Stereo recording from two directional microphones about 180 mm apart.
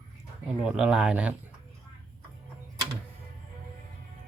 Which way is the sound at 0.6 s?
5° right (ahead or behind).